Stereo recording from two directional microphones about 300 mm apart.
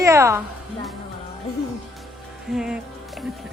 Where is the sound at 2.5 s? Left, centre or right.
Centre.